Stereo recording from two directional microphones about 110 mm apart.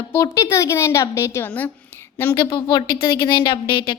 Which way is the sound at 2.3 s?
40° left (ahead or behind).